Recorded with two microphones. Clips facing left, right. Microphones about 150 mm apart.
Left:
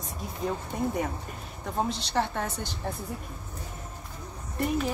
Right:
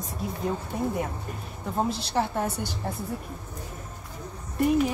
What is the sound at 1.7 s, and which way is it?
A woman's voice, 5° right (ahead or behind).